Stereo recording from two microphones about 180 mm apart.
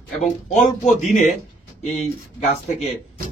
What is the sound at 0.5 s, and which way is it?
Speech, 40° left (ahead or behind).